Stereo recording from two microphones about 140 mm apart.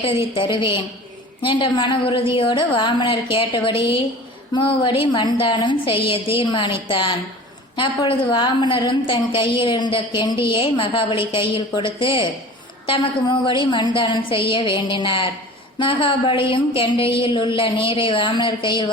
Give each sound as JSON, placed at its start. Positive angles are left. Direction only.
{"t": 0.0, "sound": "a woman's voice", "side_deg": 40}